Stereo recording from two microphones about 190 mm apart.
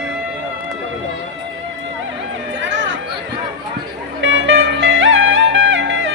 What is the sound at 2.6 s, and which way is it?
Chatter, 75° right (ahead or behind).